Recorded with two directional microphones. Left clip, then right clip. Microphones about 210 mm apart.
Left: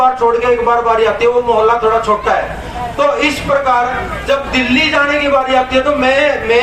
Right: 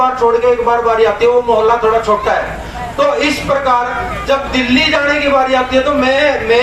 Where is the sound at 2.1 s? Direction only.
30° left (ahead or behind).